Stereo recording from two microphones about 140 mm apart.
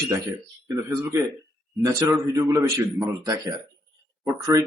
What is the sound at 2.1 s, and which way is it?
A man's voice, 25° right (ahead or behind).